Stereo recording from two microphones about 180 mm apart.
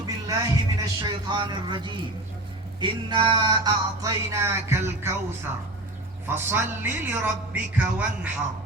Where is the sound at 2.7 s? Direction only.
25° right (ahead or behind).